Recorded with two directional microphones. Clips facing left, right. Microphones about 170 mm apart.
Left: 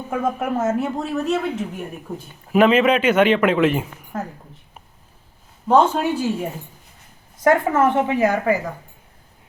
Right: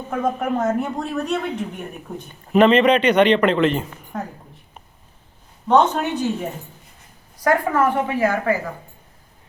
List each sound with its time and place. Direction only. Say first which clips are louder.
0.1 s a woman's voice: right 1 dB; 5° left (ahead or behind)
5.6 s speech: left 1 dB; 10° left (ahead or behind)
7.3 s a woman's voice: left 2 dB; 25° left (ahead or behind)